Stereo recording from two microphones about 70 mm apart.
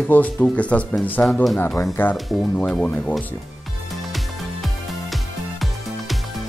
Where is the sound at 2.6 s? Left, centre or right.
Centre.